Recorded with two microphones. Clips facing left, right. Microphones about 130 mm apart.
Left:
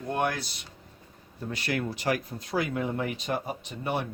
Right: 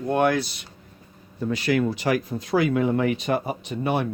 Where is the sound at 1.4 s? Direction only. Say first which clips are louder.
Right 9 dB; 90° right.